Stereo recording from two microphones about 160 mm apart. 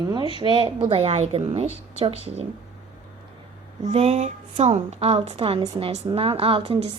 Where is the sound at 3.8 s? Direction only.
40° right (ahead or behind).